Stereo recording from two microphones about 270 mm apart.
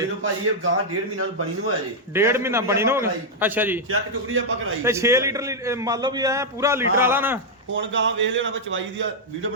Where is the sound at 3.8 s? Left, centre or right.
Right.